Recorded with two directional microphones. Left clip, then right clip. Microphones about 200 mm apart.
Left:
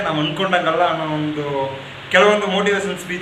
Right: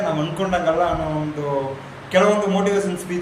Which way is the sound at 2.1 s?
10° right (ahead or behind).